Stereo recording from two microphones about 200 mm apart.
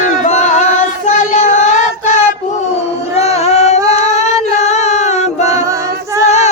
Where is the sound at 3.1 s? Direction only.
30° left (ahead or behind).